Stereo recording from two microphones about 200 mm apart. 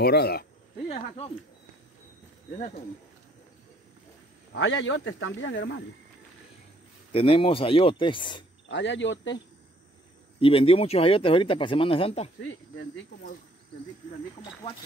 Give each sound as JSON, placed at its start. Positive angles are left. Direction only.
{"t": 0.0, "sound": "speech", "side_deg": 50}
{"t": 0.8, "sound": "speech", "side_deg": 30}
{"t": 4.6, "sound": "speech", "side_deg": 70}
{"t": 7.1, "sound": "speech", "side_deg": 25}
{"t": 8.6, "sound": "speech", "side_deg": 65}
{"t": 10.4, "sound": "speech", "side_deg": 30}
{"t": 12.4, "sound": "speech", "side_deg": 70}